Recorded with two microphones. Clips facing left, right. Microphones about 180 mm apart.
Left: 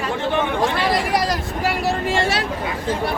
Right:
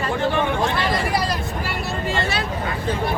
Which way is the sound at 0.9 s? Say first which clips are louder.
Left 2 dB; 90° left.